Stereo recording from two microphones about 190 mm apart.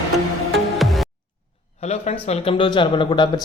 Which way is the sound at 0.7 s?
Centre (ahead or behind).